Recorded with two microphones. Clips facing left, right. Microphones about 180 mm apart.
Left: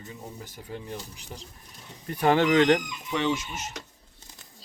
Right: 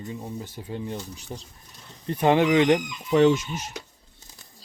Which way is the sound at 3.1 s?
45° right (ahead or behind).